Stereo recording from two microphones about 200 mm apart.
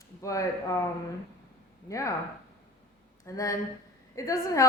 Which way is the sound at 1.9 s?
15° left (ahead or behind).